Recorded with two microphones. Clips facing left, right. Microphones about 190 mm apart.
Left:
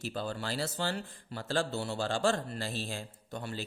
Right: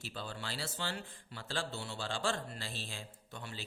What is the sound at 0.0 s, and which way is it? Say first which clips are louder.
A man's voice: left 8 dB; 45° left (ahead or behind).